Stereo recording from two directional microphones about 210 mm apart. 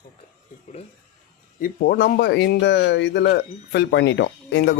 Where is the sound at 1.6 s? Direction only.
45° left (ahead or behind).